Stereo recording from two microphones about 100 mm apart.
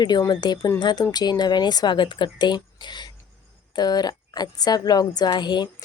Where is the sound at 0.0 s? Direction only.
45° left (ahead or behind).